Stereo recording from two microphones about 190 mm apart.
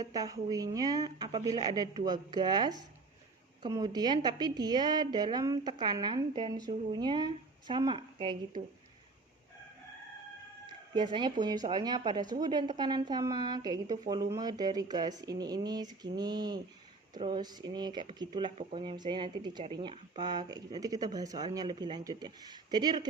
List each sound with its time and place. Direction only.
0.0 s speech: 20° right (ahead or behind)
10.9 s speech: 25° right (ahead or behind)